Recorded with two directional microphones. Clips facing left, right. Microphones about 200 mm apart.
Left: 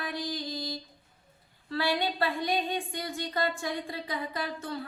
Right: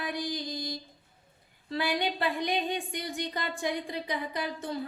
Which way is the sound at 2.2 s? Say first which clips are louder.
Even; 20° right (ahead or behind).